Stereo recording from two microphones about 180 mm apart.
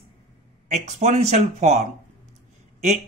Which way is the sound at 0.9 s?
40° right (ahead or behind).